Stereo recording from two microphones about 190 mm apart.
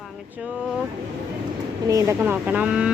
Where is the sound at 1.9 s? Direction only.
15° right (ahead or behind).